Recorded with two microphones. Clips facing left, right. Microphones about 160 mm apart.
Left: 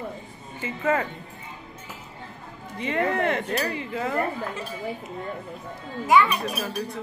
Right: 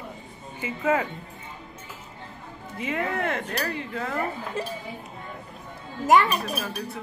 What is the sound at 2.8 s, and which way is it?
Speech, 5° right (ahead or behind).